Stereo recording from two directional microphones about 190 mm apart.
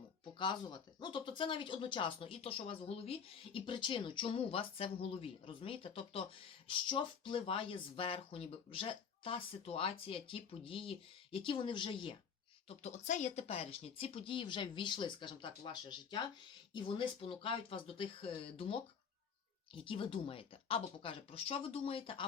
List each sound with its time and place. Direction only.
0.3 s speech: 25° left (ahead or behind)